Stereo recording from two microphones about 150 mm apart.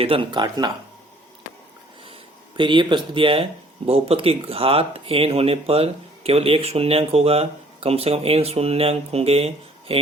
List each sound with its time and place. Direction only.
0.0 s speech: 35° right (ahead or behind)
2.6 s speech: 30° right (ahead or behind)